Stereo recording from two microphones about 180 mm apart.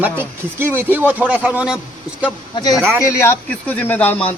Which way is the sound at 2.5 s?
20° left (ahead or behind).